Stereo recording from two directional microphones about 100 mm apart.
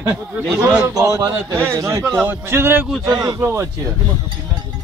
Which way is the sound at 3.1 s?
35° right (ahead or behind).